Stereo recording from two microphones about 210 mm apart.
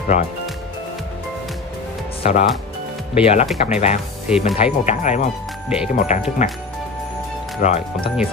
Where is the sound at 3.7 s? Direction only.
30° left (ahead or behind).